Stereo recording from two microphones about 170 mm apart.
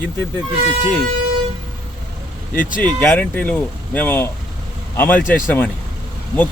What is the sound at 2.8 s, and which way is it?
Speech, 10° left (ahead or behind).